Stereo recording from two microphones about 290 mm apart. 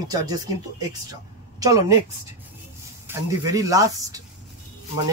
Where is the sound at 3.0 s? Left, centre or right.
Centre.